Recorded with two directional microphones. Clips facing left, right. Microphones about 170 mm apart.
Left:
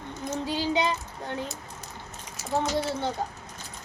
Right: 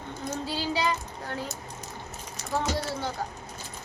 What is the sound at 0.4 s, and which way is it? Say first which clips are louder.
Child singing: left 2 dB; 15° left (ahead or behind).